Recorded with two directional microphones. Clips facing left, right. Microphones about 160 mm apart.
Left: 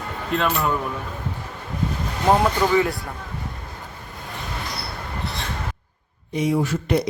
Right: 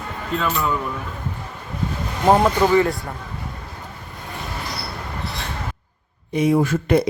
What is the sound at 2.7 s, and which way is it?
Speech, 5° left (ahead or behind).